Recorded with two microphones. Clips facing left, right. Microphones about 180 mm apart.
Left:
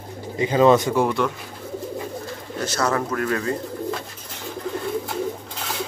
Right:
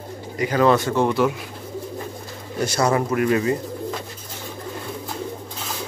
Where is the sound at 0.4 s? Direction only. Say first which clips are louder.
Left 2 dB; 20° left (ahead or behind).